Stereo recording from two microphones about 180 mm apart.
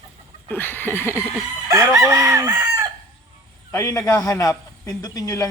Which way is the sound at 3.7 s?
15° left (ahead or behind).